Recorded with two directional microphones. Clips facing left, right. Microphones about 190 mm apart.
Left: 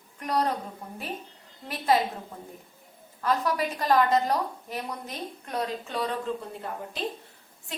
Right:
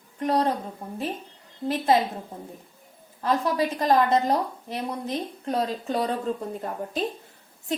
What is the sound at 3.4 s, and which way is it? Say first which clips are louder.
A woman's voice: right 4 dB; 25° right (ahead or behind).